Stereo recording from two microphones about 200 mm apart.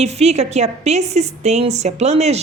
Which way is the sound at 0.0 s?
35° right (ahead or behind).